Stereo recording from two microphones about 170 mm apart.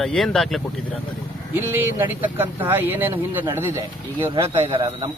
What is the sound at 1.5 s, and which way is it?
Speech, 15° right (ahead or behind).